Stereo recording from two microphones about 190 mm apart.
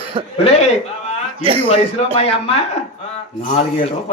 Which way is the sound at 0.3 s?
35° left (ahead or behind).